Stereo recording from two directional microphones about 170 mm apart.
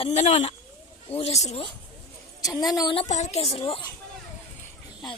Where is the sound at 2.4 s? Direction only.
20° left (ahead or behind).